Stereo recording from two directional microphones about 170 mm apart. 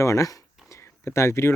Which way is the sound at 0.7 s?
15° left (ahead or behind).